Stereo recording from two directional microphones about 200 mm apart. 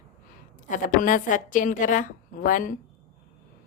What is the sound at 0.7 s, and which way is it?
A woman's voice, 40° left (ahead or behind).